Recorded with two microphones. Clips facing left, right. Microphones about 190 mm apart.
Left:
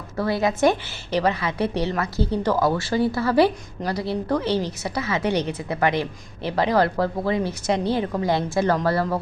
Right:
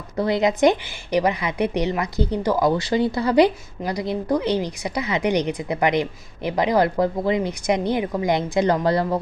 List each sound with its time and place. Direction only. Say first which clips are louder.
0.2 s a woman's voice: right 2 dB; 20° right (ahead or behind)